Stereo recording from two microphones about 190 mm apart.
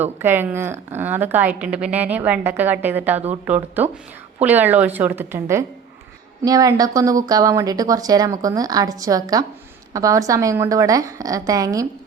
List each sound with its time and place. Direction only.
0.2 s a woman's voice: 10° right (ahead or behind)